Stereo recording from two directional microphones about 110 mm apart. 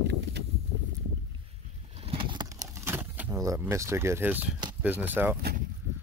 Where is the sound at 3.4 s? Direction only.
25° right (ahead or behind).